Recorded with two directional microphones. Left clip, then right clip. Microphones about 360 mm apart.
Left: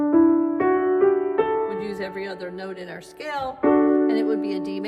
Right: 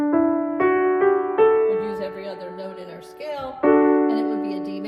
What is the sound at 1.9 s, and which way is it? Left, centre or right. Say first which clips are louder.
Speech: right 1 dB; centre.